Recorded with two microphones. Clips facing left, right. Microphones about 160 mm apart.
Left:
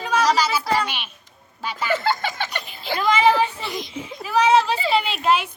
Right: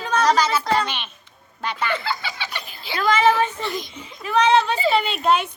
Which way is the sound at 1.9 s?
50° left (ahead or behind).